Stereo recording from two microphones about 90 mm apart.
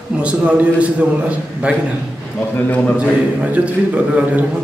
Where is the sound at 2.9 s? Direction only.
15° right (ahead or behind).